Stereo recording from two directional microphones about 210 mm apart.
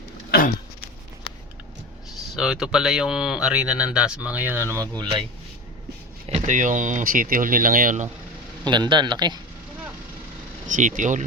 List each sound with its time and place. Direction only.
0.3 s a sound: 45° left (ahead or behind)
2.3 s speech: centre (ahead or behind)
6.2 s speech: 30° right (ahead or behind)
8.7 s a man's voice: 20° right (ahead or behind)
10.7 s speech: 35° right (ahead or behind)